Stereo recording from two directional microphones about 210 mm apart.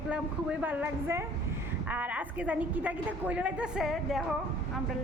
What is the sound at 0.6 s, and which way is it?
A woman's voice, 10° right (ahead or behind).